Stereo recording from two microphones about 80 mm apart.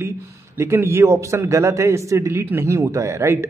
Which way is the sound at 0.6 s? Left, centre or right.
Right.